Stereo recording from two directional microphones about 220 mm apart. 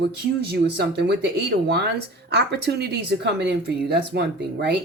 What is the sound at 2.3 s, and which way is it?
Speech, 50° right (ahead or behind).